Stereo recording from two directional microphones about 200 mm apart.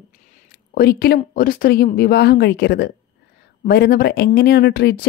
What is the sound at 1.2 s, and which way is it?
Speech, 45° left (ahead or behind).